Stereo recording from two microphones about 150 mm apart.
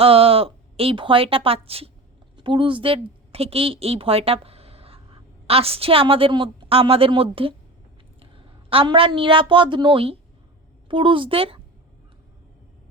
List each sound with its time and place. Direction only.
0.0 s a woman's voice: 40° right (ahead or behind)